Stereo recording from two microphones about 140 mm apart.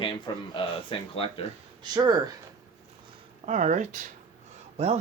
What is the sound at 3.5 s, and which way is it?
Speech, 60° right (ahead or behind).